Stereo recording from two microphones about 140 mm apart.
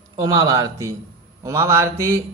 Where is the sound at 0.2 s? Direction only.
25° right (ahead or behind).